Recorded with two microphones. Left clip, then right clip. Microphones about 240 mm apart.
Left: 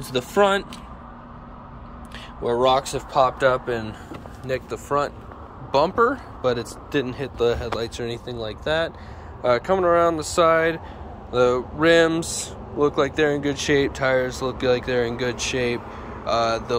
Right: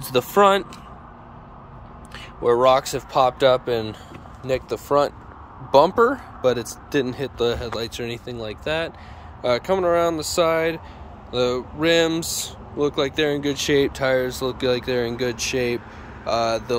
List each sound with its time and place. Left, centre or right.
0.0 s speech: right
2.1 s speech: centre